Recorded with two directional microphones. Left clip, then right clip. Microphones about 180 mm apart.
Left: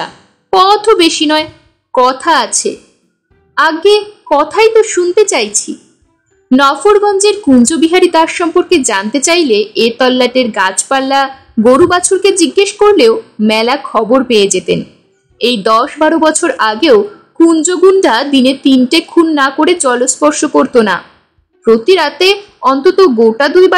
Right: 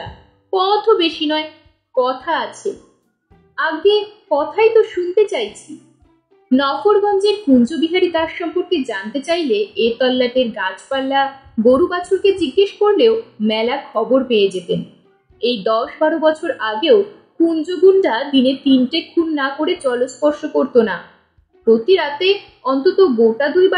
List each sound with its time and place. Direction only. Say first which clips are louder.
0.5 s a woman's voice: left 7 dB; 45° left (ahead or behind)
6.5 s a woman's voice: left 7 dB; 45° left (ahead or behind)